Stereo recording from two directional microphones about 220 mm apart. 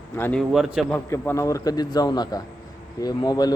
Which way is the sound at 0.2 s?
5° left (ahead or behind).